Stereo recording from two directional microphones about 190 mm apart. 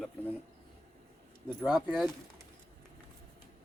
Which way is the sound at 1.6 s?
Centre (ahead or behind).